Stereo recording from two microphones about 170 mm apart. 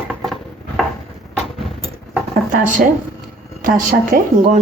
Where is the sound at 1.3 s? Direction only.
Centre (ahead or behind).